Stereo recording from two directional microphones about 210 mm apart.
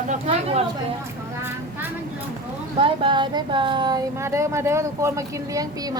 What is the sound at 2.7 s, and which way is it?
A woman's voice, 25° right (ahead or behind).